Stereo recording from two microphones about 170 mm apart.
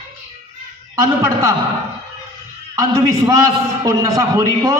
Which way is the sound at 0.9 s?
20° right (ahead or behind).